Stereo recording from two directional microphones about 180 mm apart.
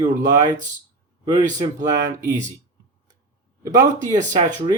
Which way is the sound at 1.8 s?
20° right (ahead or behind).